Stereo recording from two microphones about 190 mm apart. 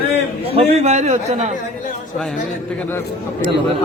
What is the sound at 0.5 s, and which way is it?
Speech, 30° right (ahead or behind).